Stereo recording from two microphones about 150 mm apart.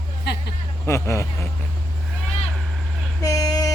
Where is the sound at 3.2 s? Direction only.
25° left (ahead or behind).